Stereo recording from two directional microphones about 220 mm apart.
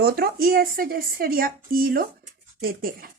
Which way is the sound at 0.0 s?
45° right (ahead or behind).